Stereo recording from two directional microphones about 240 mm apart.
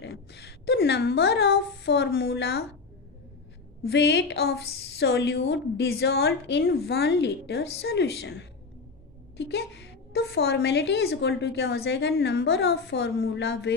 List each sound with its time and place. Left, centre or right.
0.0 s a woman's voice: left
3.8 s a woman's voice: left